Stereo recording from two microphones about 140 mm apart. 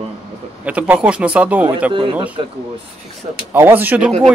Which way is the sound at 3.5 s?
15° right (ahead or behind).